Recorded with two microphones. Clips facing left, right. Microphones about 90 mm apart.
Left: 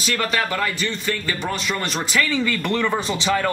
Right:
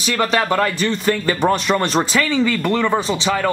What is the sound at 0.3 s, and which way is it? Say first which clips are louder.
Speech: right 7 dB; 25° right (ahead or behind).